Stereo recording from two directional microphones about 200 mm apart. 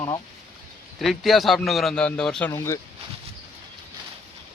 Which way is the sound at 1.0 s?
Centre (ahead or behind).